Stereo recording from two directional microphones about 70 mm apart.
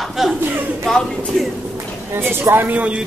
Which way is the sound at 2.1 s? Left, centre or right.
Right.